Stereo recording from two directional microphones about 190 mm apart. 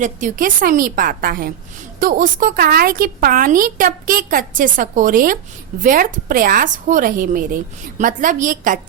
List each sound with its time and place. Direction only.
0.0 s a woman's voice: 45° right (ahead or behind)